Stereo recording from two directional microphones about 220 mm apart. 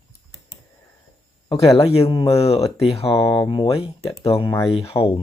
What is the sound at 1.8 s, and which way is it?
Speech, 25° left (ahead or behind).